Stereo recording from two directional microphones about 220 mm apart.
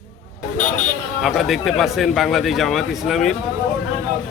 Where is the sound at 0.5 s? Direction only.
35° left (ahead or behind).